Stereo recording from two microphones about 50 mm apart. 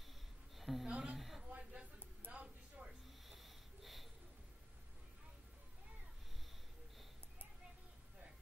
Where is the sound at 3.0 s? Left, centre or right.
Centre.